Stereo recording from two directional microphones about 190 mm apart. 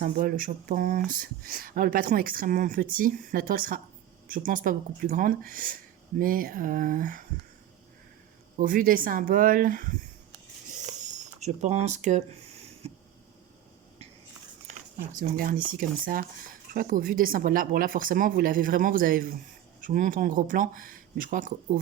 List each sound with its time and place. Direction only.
0.0 s speech: 50° right (ahead or behind)
8.5 s speech: 45° right (ahead or behind)
10.7 s a sound: 40° right (ahead or behind)
15.1 s speech: 45° right (ahead or behind)